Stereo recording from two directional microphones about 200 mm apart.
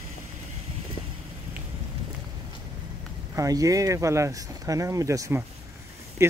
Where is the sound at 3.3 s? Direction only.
15° right (ahead or behind).